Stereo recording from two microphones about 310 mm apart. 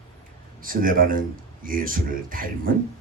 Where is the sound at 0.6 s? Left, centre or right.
Right.